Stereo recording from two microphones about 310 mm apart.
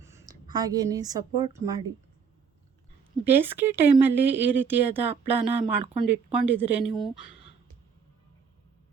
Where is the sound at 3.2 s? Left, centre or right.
Centre.